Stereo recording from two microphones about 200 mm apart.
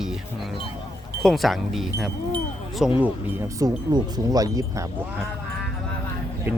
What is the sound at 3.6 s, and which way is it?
Speech, 20° right (ahead or behind).